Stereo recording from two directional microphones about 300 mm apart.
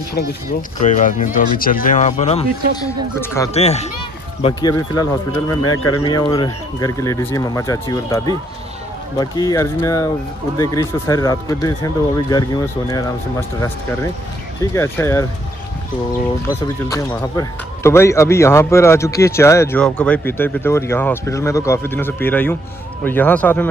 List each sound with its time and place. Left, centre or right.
0.1 s speech: left; by 15.2 s centre
16.4 s speech: centre